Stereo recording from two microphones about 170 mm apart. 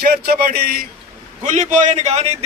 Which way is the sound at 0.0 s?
65° right (ahead or behind).